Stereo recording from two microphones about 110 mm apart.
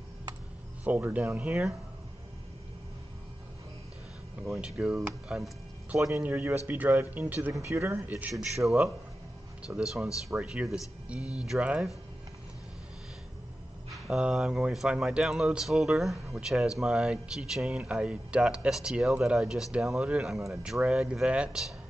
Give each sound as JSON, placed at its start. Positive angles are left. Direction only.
{"t": 0.8, "sound": "speech", "side_deg": -15}
{"t": 4.5, "sound": "speech", "side_deg": -10}
{"t": 8.5, "sound": "speech", "side_deg": 0}
{"t": 13.9, "sound": "speech", "side_deg": -5}